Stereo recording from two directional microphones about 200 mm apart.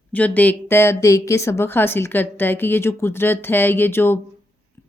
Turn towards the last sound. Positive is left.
turn(degrees=10)  # may be behind; listen again after turning